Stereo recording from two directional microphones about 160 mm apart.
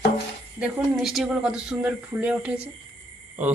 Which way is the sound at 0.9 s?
Centre (ahead or behind).